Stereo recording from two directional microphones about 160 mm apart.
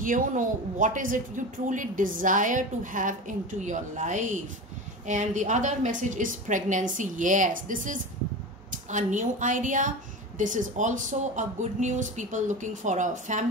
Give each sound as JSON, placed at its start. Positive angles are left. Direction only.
{"t": 0.0, "sound": "a woman's voice", "side_deg": -55}